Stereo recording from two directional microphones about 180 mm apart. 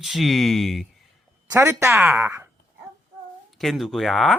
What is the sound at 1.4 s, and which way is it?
A woman's voice, 15° right (ahead or behind).